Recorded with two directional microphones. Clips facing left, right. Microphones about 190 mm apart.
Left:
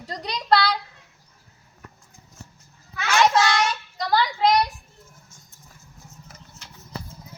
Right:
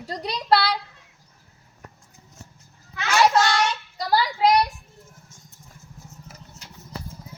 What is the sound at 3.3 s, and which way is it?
Child singing, 10° left (ahead or behind).